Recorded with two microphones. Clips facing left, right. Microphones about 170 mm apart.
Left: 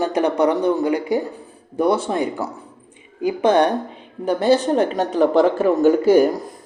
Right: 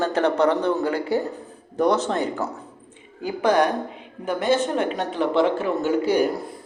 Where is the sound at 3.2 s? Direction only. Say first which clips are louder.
Left 4 dB; 25° left (ahead or behind).